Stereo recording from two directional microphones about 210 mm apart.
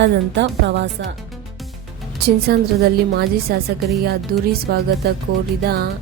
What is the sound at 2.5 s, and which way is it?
Music, 50° right (ahead or behind).